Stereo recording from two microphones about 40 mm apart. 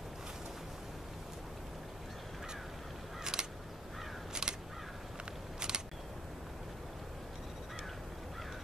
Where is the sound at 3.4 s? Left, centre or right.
Centre.